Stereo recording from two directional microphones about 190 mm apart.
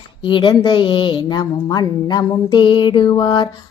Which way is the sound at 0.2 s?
25° left (ahead or behind).